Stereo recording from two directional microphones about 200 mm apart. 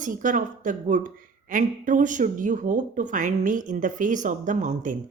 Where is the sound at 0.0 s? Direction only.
40° right (ahead or behind).